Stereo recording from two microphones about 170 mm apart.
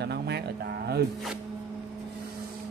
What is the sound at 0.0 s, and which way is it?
Cattle, 75° right (ahead or behind).